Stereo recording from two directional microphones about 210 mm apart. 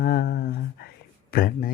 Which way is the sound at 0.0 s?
45° left (ahead or behind).